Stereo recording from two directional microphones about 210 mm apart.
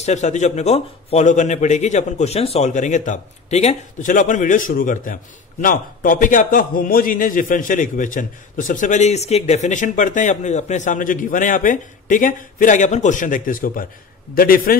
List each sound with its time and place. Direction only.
0.0 s a man's voice: 35° left (ahead or behind)